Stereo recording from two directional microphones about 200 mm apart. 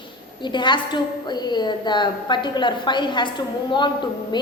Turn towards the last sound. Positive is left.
turn(degrees=25)  # may be behind; listen again after turning